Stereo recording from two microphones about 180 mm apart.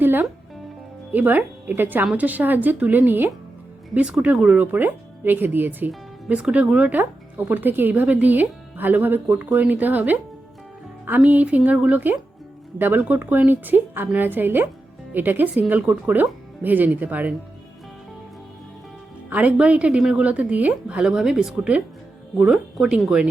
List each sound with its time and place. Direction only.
0.0 s music: 10° right (ahead or behind)
1.1 s speech: 10° right (ahead or behind)
19.3 s speech: 10° right (ahead or behind)